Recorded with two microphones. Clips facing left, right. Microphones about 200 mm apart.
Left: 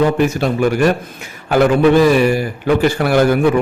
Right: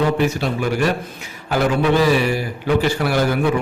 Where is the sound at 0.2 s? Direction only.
50° left (ahead or behind).